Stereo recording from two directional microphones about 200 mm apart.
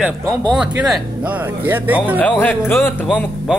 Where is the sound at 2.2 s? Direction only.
10° left (ahead or behind).